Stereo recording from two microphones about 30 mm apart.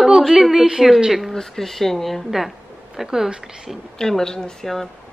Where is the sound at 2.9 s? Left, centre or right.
Centre.